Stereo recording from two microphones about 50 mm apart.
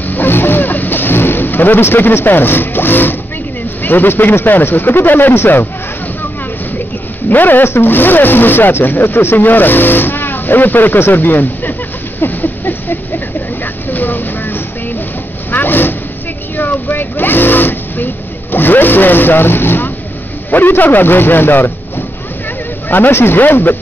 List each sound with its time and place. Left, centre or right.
0.1 s vehicle: left
3.8 s speech: left
7.2 s speech: left
12.2 s a sound: left
13.8 s vehicle: left
16.9 s vehicle: left
20.5 s speech: left